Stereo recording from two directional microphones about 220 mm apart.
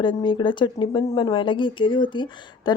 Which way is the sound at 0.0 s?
20° left (ahead or behind).